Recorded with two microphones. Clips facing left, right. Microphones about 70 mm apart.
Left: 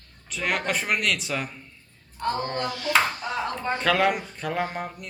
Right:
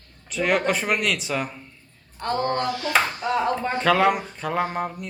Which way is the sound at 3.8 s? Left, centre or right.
Centre.